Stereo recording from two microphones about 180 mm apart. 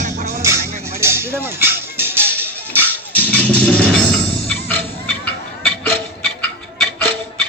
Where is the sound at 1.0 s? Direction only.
15° right (ahead or behind).